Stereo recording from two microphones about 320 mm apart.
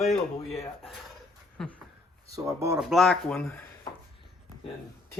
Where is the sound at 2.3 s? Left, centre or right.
Centre.